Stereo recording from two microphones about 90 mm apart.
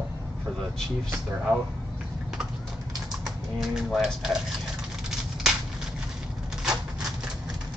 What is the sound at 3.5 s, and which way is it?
Speech, 5° right (ahead or behind).